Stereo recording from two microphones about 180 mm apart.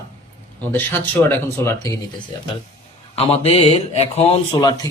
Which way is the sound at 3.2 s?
35° left (ahead or behind).